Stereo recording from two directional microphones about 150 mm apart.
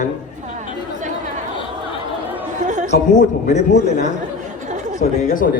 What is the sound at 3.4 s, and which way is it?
Speech, 55° left (ahead or behind).